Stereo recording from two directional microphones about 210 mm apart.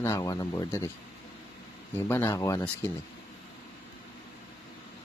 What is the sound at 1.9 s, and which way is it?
Speech, 10° left (ahead or behind).